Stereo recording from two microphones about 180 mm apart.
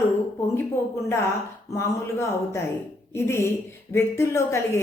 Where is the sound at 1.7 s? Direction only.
15° left (ahead or behind).